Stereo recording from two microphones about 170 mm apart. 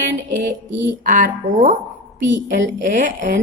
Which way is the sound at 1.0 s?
50° right (ahead or behind).